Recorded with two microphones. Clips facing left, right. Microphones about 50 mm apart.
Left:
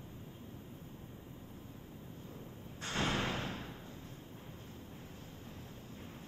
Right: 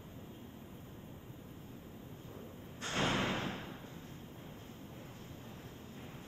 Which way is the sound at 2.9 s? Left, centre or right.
Right.